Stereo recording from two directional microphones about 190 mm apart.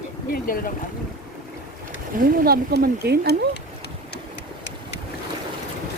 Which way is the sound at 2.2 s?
50° right (ahead or behind).